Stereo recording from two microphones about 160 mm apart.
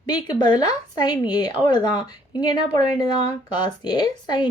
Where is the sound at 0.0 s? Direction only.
25° left (ahead or behind).